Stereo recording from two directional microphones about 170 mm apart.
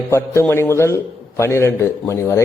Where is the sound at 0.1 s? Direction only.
15° left (ahead or behind).